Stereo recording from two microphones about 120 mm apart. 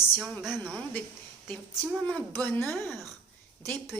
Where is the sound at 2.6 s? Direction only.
Centre (ahead or behind).